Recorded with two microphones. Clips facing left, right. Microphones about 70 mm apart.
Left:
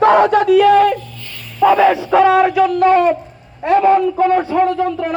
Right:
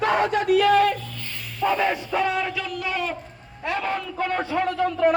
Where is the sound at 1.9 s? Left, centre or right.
Left.